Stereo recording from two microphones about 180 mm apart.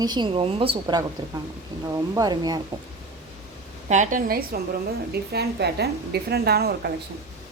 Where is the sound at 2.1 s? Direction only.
20° right (ahead or behind).